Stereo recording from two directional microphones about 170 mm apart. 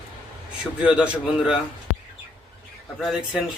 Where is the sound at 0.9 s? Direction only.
5° right (ahead or behind).